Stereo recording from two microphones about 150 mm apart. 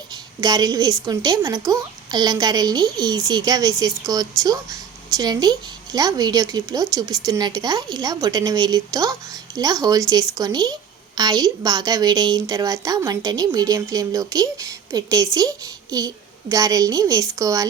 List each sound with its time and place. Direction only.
0.1 s a woman's voice: 25° right (ahead or behind)